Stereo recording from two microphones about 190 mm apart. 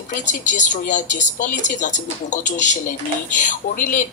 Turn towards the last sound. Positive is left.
turn(degrees=40)  # may be behind; listen again after turning